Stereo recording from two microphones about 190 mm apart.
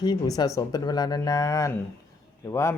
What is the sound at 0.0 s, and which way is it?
Speech, 20° left (ahead or behind).